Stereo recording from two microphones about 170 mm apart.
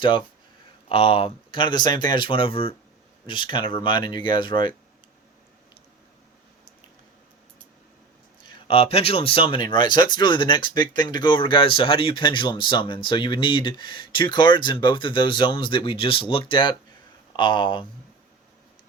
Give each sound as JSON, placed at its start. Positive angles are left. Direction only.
{"t": 0.9, "sound": "speech", "side_deg": 35}
{"t": 8.4, "sound": "speech", "side_deg": 30}